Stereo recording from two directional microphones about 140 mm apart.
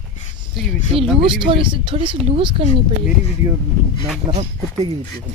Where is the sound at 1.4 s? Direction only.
35° right (ahead or behind).